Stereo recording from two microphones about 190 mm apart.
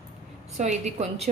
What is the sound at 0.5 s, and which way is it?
Speech, 35° right (ahead or behind).